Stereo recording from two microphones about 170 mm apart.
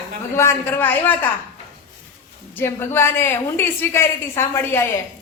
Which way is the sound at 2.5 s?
15° left (ahead or behind).